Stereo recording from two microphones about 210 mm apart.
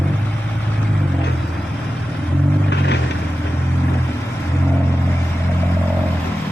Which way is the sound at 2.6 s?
55° left (ahead or behind).